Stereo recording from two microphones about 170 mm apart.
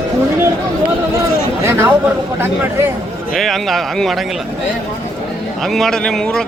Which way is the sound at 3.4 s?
Centre (ahead or behind).